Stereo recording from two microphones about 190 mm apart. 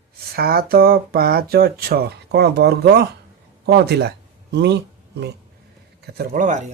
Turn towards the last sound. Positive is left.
turn(degrees=-40)  # may be behind; listen again after turning